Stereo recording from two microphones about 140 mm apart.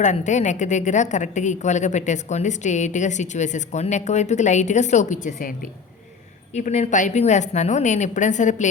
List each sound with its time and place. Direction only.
0.0 s a woman's voice: 60° left (ahead or behind)
6.5 s a woman's voice: 55° left (ahead or behind)